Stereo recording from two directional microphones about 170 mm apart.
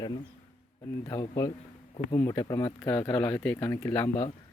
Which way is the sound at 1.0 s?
20° left (ahead or behind).